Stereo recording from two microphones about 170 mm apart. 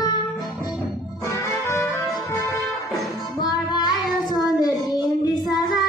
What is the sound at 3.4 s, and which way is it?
Music, 25° left (ahead or behind).